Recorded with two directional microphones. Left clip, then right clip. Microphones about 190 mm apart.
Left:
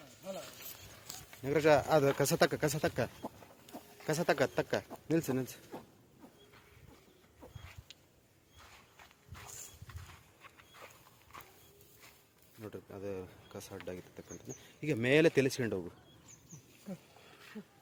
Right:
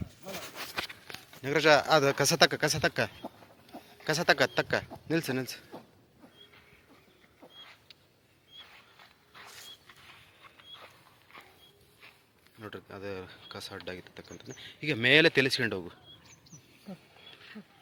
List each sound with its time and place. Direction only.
1.4 s speech: centre (ahead or behind)
9.3 s a sound: 10° right (ahead or behind)
12.6 s speech: centre (ahead or behind)
16.9 s speech: 30° left (ahead or behind)